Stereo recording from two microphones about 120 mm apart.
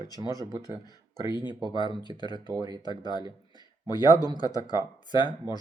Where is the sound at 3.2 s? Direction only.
35° right (ahead or behind).